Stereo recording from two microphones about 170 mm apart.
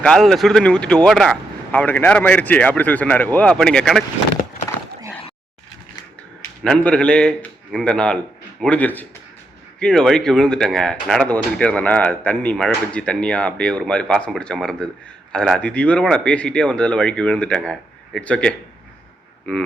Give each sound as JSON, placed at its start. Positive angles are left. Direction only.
{"t": 0.0, "sound": "speech", "side_deg": 5}
{"t": 4.7, "sound": "a sound", "side_deg": 20}
{"t": 6.7, "sound": "a man's voice", "side_deg": 5}